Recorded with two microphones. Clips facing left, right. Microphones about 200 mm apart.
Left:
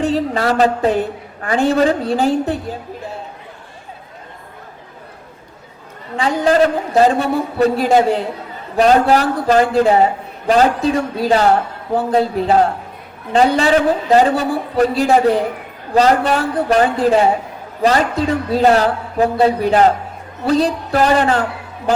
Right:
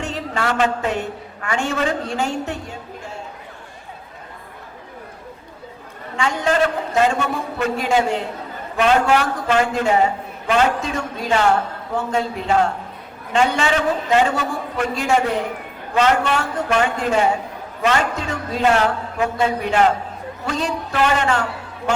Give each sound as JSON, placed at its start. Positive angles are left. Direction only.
{"t": 0.0, "sound": "a man's voice", "side_deg": 35}
{"t": 6.1, "sound": "a man's voice", "side_deg": 35}